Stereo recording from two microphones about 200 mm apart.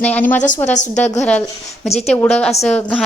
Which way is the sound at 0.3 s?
40° left (ahead or behind).